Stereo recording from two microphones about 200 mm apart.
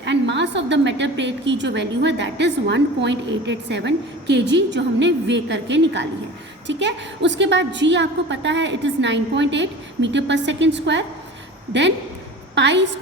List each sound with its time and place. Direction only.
0.0 s a woman's voice: 60° right (ahead or behind)